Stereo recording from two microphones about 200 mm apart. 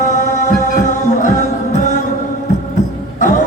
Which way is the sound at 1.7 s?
40° left (ahead or behind).